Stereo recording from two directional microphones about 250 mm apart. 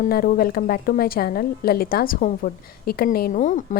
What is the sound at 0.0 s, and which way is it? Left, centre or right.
A woman's voice, left.